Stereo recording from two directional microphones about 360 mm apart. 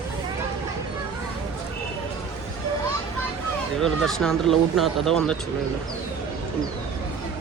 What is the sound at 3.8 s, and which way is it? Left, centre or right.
Speech, centre.